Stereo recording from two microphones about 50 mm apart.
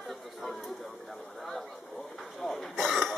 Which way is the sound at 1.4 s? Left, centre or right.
Centre.